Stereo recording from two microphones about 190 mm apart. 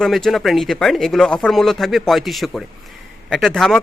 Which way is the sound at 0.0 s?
Centre (ahead or behind).